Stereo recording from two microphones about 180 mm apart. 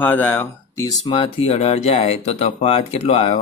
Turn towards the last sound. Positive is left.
turn(degrees=35)  # may be behind; listen again after turning